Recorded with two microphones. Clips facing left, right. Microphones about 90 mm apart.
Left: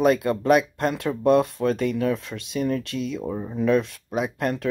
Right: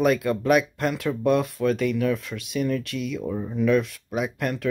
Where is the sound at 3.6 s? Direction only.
30° left (ahead or behind).